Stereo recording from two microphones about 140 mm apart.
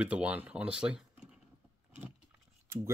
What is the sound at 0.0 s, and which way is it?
Speech, 10° right (ahead or behind).